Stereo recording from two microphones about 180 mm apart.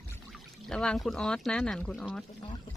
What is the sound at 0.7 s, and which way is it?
A woman's voice, 5° left (ahead or behind).